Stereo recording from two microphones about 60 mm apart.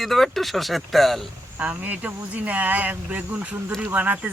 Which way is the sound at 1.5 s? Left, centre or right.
Right.